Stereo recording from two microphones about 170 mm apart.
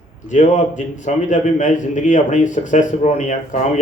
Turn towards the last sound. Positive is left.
turn(degrees=45)  # may be behind; listen again after turning